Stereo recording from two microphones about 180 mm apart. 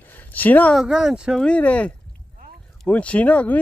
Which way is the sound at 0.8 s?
5° right (ahead or behind).